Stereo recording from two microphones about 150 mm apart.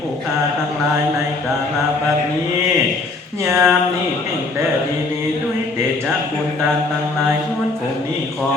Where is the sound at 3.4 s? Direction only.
15° right (ahead or behind).